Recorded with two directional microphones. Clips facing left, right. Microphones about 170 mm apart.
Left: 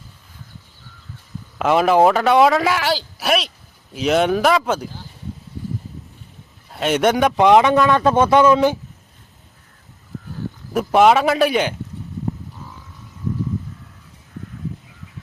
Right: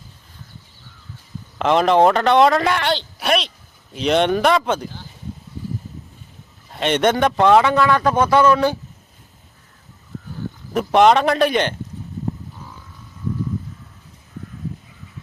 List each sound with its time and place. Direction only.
1.5 s a woman's voice: 5° left (ahead or behind)
6.7 s a man's voice: 5° left (ahead or behind)
10.7 s a woman's voice: 5° left (ahead or behind)